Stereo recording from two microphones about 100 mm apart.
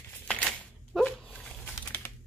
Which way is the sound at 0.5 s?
10° left (ahead or behind).